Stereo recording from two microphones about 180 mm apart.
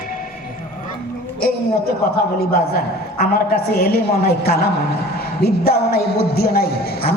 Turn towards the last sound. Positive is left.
turn(degrees=60)  # may be behind; listen again after turning